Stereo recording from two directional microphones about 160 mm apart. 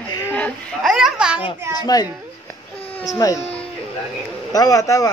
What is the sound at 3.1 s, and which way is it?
Speech, 20° left (ahead or behind).